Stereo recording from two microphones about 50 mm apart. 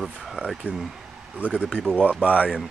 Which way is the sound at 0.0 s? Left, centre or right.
Centre.